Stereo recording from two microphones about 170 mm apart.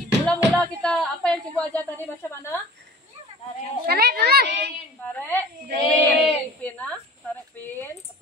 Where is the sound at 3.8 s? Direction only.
65° right (ahead or behind).